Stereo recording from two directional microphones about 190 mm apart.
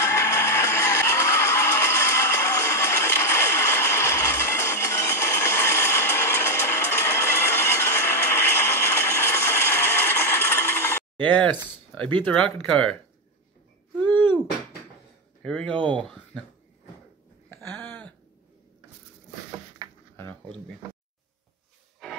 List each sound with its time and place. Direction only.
0.0 s music: 15° left (ahead or behind)
12.3 s speech: 5° left (ahead or behind)
14.0 s a sound: 10° left (ahead or behind)
15.4 s speech: 5° left (ahead or behind)
15.7 s speech: 25° right (ahead or behind)
17.5 s a sound: 10° left (ahead or behind)
22.0 s music: centre (ahead or behind)